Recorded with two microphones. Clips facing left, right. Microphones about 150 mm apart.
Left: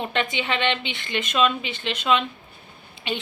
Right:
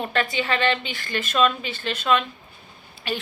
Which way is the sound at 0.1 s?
20° left (ahead or behind).